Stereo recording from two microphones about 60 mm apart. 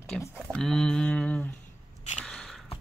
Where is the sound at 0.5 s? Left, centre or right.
Centre.